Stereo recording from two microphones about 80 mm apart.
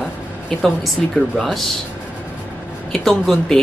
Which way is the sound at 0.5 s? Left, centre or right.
Centre.